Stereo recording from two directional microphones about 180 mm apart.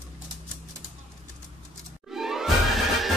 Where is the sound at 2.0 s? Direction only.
Centre (ahead or behind).